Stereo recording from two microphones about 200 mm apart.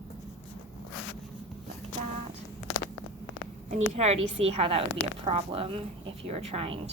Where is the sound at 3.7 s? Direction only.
35° right (ahead or behind).